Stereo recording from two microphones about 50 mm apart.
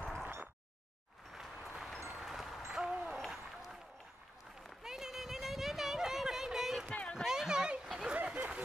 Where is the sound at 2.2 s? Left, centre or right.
Centre.